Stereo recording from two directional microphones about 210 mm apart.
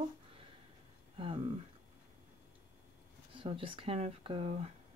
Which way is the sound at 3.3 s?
25° right (ahead or behind).